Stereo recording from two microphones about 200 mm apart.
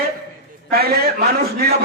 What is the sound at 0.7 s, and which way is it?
A man's voice, 50° right (ahead or behind).